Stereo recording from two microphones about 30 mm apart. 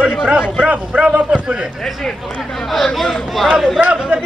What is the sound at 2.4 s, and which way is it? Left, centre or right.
Speech, centre.